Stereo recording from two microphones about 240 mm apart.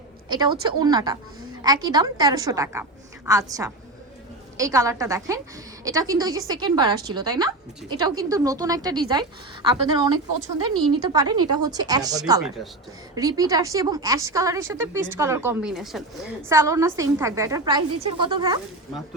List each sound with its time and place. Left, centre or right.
0.3 s a woman's voice: centre
16.5 s speech: centre